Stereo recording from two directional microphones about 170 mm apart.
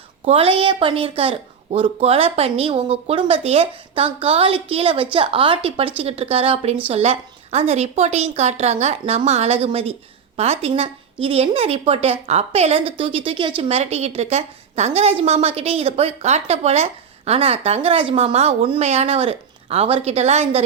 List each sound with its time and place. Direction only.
0.3 s a woman's voice: 35° right (ahead or behind)